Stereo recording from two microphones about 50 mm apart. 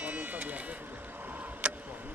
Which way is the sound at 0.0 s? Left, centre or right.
Right.